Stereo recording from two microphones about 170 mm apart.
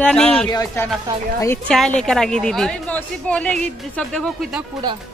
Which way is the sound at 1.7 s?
5° left (ahead or behind).